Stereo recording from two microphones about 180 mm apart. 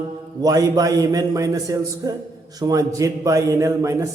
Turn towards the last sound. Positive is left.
turn(degrees=-20)  # may be behind; listen again after turning